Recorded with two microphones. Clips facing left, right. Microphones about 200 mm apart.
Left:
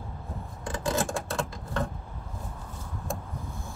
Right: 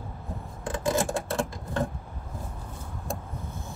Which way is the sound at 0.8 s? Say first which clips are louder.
Right 2 dB; 25° right (ahead or behind).